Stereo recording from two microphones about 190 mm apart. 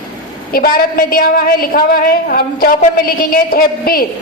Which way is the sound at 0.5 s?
50° left (ahead or behind).